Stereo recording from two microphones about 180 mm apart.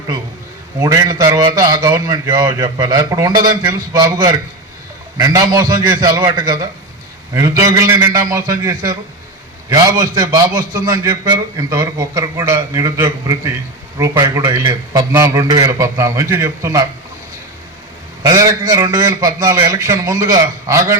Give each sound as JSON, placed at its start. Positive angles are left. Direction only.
{"t": 0.8, "sound": "a man's voice", "side_deg": -20}
{"t": 18.2, "sound": "a man's voice", "side_deg": -20}